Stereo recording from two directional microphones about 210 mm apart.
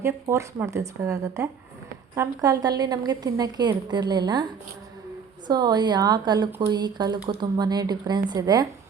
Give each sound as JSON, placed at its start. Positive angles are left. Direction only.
{"t": 0.0, "sound": "a woman's voice", "side_deg": -10}
{"t": 5.5, "sound": "a woman's voice", "side_deg": -20}